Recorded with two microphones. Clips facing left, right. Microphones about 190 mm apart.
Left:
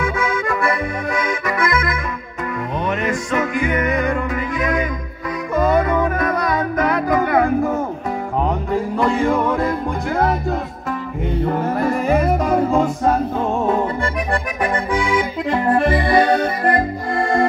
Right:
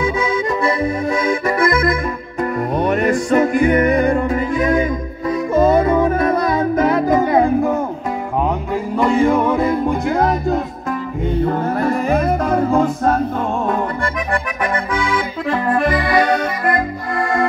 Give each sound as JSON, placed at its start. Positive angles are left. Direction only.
{"t": 0.0, "sound": "accordion", "side_deg": -20}
{"t": 2.7, "sound": "music", "side_deg": -40}
{"t": 8.9, "sound": "music", "side_deg": 0}
{"t": 15.1, "sound": "accordion", "side_deg": 20}